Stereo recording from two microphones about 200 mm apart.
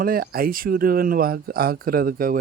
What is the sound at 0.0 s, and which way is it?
Speech, 50° right (ahead or behind).